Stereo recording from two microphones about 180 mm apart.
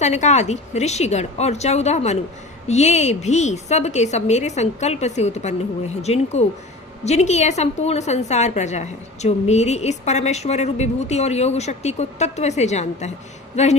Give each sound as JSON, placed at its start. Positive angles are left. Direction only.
{"t": 0.0, "sound": "a woman's voice", "side_deg": 40}